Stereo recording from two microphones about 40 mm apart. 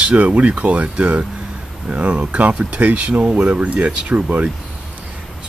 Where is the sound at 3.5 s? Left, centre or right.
Right.